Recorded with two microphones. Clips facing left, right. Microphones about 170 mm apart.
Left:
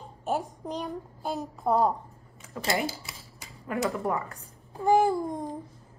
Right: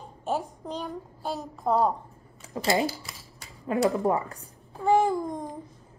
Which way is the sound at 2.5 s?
20° right (ahead or behind).